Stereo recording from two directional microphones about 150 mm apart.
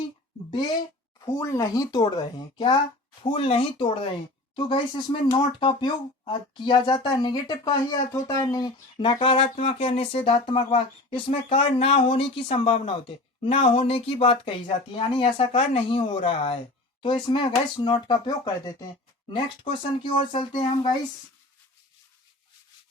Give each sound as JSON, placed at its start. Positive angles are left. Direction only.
{"t": 1.2, "sound": "speech", "side_deg": 20}